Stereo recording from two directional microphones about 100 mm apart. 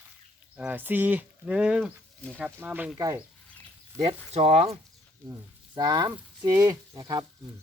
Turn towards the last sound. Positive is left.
turn(degrees=-35)  # may be behind; listen again after turning